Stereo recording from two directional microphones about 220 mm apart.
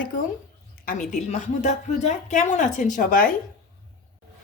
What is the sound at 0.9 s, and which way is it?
A woman's voice, 35° left (ahead or behind).